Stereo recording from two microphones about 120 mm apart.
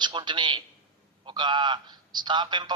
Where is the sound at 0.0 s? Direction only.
40° right (ahead or behind).